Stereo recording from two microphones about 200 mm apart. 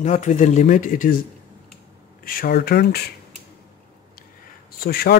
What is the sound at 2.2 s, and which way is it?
Speech, 45° left (ahead or behind).